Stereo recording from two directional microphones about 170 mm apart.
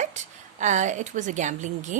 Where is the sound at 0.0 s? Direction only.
45° right (ahead or behind).